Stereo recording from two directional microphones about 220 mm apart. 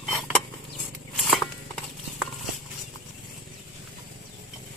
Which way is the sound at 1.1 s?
Centre (ahead or behind).